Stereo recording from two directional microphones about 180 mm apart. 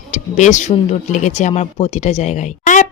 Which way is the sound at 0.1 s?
40° left (ahead or behind).